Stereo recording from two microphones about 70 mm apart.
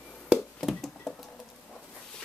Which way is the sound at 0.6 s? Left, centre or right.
Centre.